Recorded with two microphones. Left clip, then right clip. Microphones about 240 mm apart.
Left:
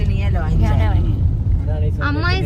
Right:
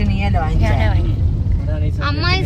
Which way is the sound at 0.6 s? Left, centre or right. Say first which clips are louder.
Right 3 dB; centre.